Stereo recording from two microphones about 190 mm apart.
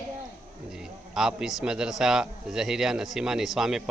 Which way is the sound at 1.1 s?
Centre (ahead or behind).